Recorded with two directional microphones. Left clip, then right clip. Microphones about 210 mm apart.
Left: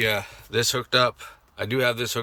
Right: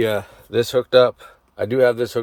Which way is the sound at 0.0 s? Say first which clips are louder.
Right 3 dB; 35° right (ahead or behind).